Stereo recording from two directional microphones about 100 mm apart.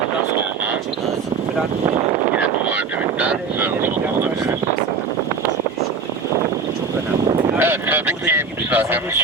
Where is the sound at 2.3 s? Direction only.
15° right (ahead or behind).